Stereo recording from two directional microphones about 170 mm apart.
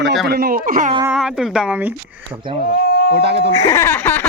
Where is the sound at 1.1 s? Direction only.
5° right (ahead or behind).